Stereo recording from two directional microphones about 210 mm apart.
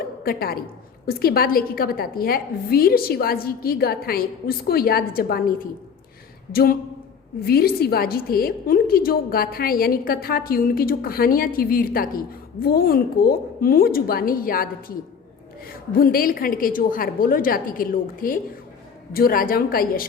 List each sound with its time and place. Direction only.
0.2 s a woman's voice: 45° left (ahead or behind)